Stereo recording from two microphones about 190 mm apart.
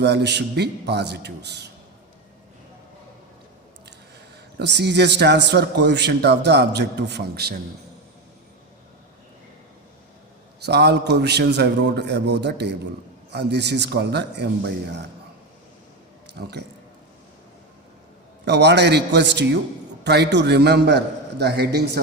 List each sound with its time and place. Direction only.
0.0 s a man's voice: 65° right (ahead or behind)
4.6 s a man's voice: 65° right (ahead or behind)
10.6 s a man's voice: 60° right (ahead or behind)
18.4 s a man's voice: 60° right (ahead or behind)